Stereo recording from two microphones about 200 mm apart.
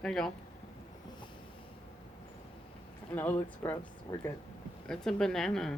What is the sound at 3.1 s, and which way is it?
Speech, 10° left (ahead or behind).